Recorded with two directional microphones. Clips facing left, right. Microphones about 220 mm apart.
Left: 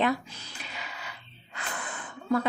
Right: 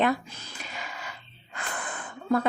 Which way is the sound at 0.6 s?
50° right (ahead or behind).